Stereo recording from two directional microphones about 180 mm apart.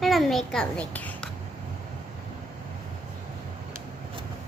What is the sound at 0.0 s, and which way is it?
A child's voice, centre (ahead or behind).